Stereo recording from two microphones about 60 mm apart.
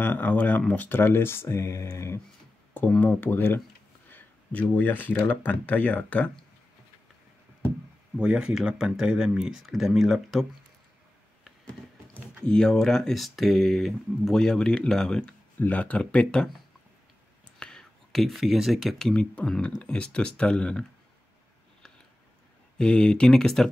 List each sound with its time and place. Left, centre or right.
0.0 s speech: left
0.8 s speech: left
3.0 s speech: left
4.1 s a sound: left
4.8 s speech: left
8.2 s speech: centre
12.4 s speech: centre
15.6 s speech: left
17.6 s speech: centre
22.8 s speech: centre